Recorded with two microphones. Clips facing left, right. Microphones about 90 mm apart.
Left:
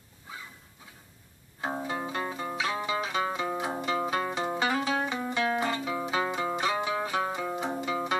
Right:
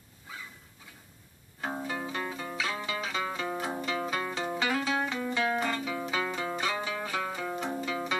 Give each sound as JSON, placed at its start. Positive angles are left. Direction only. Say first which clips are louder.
{"t": 1.6, "sound": "zither", "louder": "left 2 dB", "side_deg": 15}
{"t": 3.4, "sound": "music", "louder": "left 2 dB", "side_deg": 5}
{"t": 3.7, "sound": "music", "louder": "left 3 dB", "side_deg": 20}
{"t": 6.0, "sound": "zither", "louder": "left 5 dB", "side_deg": 15}
{"t": 7.0, "sound": "music", "louder": "left 4 dB", "side_deg": 20}